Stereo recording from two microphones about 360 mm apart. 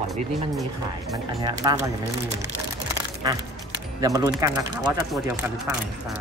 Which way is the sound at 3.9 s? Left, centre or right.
Centre.